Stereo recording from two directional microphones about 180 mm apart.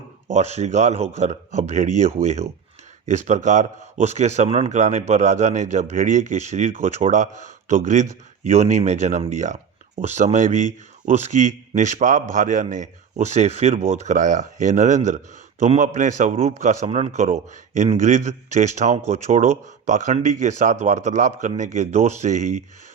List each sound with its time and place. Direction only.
0.3 s a man's voice: 40° right (ahead or behind)